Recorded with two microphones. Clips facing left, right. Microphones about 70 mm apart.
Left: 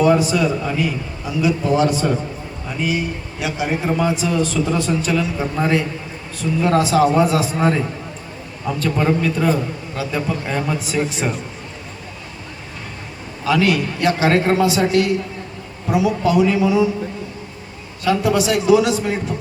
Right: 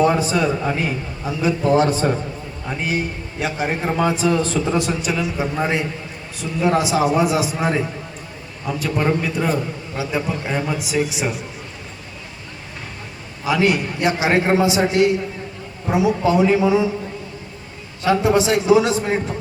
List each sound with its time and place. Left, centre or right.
0.0 s a man's voice: right
4.9 s a man's voice: centre
13.4 s a man's voice: right
18.0 s a man's voice: right